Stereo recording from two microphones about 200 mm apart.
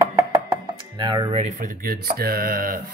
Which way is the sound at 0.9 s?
25° right (ahead or behind).